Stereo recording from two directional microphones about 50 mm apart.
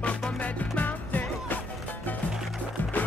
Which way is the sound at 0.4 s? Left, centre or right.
Left.